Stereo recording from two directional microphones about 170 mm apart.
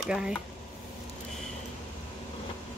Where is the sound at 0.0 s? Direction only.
Centre (ahead or behind).